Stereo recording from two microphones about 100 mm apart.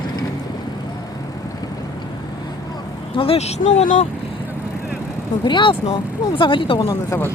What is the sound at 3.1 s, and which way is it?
Speech, 70° left (ahead or behind).